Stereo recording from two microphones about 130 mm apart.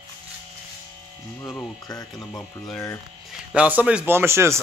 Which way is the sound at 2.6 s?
20° left (ahead or behind).